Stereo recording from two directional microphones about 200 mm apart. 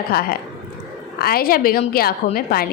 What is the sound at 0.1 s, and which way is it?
A woman's voice, 50° left (ahead or behind).